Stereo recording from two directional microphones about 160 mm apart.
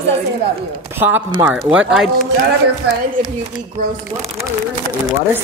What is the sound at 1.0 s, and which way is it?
Chopping, 10° right (ahead or behind).